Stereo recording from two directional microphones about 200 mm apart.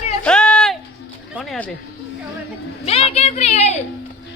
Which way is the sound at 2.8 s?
30° left (ahead or behind).